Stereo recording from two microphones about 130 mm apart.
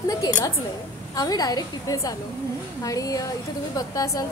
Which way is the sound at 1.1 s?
30° left (ahead or behind).